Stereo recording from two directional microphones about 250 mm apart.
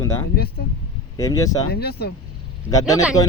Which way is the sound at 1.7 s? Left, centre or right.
Left.